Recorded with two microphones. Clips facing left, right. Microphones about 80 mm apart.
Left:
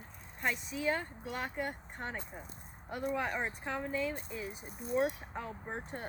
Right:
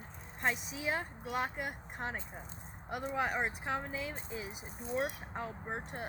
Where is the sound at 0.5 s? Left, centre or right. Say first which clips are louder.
Left 1 dB; right.